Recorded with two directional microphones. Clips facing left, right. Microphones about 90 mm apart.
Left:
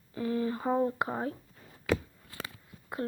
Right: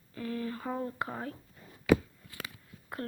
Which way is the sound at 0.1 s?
20° left (ahead or behind).